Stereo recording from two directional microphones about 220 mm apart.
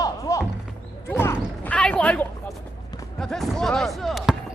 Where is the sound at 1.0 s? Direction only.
10° left (ahead or behind).